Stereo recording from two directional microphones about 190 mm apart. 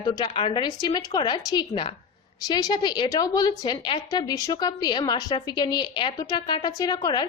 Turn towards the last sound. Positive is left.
turn(degrees=20)  # may be behind; listen again after turning